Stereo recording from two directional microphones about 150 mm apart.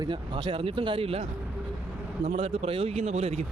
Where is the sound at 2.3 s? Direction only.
45° right (ahead or behind).